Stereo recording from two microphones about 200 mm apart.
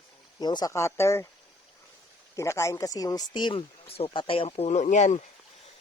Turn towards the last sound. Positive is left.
turn(degrees=35)  # may be behind; listen again after turning